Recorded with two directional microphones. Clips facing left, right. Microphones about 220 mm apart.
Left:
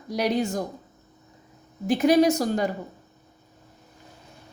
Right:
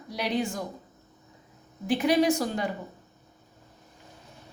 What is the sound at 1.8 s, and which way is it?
Speech, 45° left (ahead or behind).